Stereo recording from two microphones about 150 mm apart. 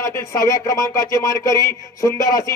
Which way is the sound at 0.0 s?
20° left (ahead or behind).